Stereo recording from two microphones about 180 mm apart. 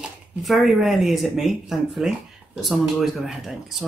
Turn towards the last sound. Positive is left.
turn(degrees=0)  # may be behind; listen again after turning